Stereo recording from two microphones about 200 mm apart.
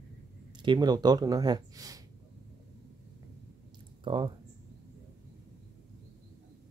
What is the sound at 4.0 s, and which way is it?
Speech, 25° right (ahead or behind).